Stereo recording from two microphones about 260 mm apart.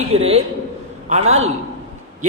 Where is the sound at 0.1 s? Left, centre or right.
Right.